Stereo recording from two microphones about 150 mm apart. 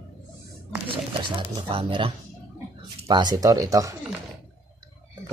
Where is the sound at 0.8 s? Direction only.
35° right (ahead or behind).